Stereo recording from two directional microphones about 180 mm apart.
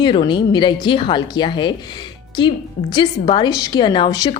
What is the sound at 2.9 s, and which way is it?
Speech, 25° left (ahead or behind).